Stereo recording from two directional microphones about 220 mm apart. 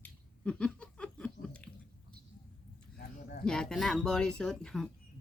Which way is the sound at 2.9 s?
45° left (ahead or behind).